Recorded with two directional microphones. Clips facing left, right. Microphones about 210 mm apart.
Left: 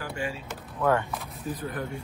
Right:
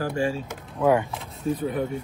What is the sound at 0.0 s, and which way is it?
Speech, 40° right (ahead or behind).